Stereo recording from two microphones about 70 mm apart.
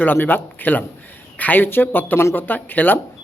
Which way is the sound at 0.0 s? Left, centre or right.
Left.